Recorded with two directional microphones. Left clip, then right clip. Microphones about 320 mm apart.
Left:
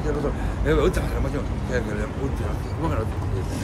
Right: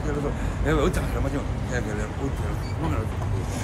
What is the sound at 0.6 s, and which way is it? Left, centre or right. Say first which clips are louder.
Speech: left 3 dB; centre.